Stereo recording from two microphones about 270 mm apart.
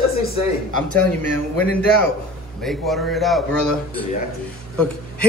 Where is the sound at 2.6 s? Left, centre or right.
Centre.